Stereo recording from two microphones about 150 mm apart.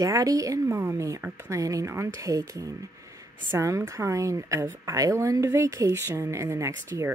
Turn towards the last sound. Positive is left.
turn(degrees=-20)  # may be behind; listen again after turning